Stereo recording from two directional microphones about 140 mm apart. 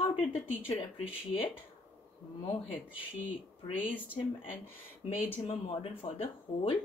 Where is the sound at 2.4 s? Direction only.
40° left (ahead or behind).